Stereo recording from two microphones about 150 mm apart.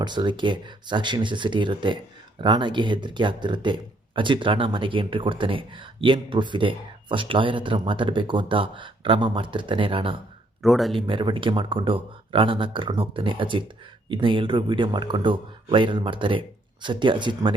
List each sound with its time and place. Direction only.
0.0 s speech: 30° right (ahead or behind)
10.6 s speech: centre (ahead or behind)
10.9 s speech: 35° right (ahead or behind)